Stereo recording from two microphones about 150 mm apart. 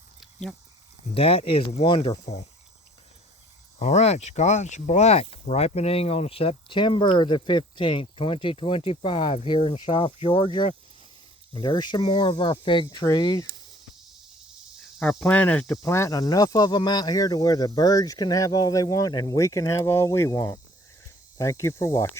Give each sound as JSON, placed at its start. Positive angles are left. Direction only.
{"t": 0.2, "sound": "a sound", "side_deg": 5}
{"t": 1.1, "sound": "speech", "side_deg": 40}
{"t": 3.8, "sound": "speech", "side_deg": 45}
{"t": 14.9, "sound": "speech", "side_deg": 5}